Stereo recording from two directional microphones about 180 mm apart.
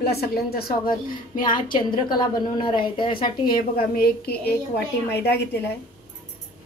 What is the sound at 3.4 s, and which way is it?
A woman's voice, 55° left (ahead or behind).